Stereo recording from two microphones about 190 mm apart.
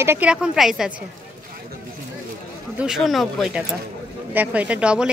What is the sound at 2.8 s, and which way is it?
A woman's voice, centre (ahead or behind).